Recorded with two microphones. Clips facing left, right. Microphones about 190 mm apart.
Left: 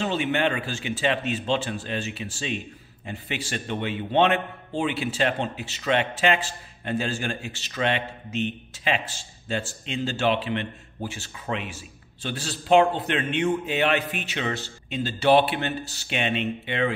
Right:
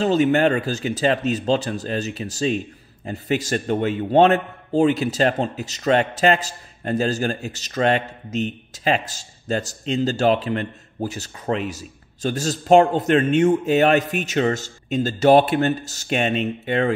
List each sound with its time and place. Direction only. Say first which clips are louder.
0.0 s a man's voice: right 7 dB; 40° right (ahead or behind)